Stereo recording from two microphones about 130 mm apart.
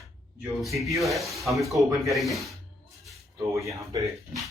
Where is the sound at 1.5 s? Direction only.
25° right (ahead or behind).